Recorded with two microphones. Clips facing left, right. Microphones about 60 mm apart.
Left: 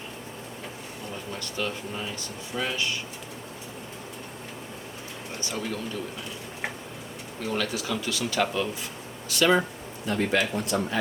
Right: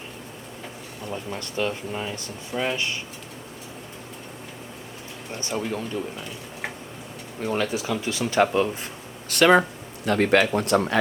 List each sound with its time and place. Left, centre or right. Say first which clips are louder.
1.3 s speech: right 4 dB; right
5.4 s speech: right 4 dB; right
7.4 s speech: right 4 dB; right
9.3 s speech: right 5 dB; right